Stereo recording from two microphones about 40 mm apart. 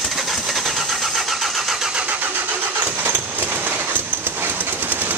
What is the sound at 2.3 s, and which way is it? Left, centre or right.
Vehicle, right.